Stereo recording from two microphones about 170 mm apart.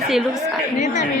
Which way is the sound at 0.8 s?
45° left (ahead or behind).